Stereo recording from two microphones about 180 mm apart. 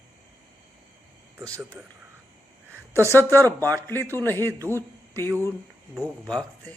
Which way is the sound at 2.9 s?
15° right (ahead or behind).